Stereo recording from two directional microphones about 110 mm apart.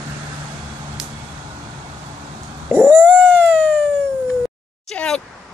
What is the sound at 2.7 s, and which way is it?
Cat, 20° right (ahead or behind).